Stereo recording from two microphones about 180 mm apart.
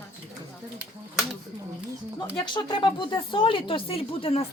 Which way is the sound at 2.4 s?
25° left (ahead or behind).